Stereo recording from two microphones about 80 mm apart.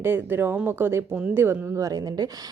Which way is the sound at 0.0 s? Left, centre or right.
Right.